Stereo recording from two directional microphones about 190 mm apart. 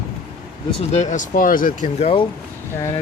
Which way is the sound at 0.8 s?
35° left (ahead or behind).